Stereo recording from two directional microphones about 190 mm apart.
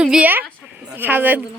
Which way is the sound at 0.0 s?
5° right (ahead or behind).